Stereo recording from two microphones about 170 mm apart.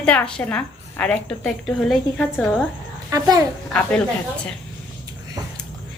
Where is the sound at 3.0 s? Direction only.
20° right (ahead or behind).